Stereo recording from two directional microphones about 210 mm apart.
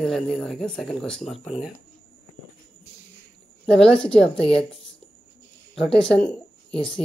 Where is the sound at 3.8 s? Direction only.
25° left (ahead or behind).